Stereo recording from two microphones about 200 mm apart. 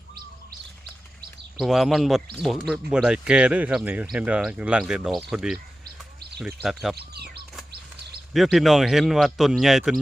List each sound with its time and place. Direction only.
1.5 s speech: centre (ahead or behind)
6.9 s speech: 55° right (ahead or behind)
8.3 s speech: centre (ahead or behind)